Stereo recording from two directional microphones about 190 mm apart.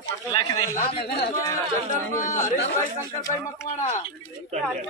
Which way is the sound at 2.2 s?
40° left (ahead or behind).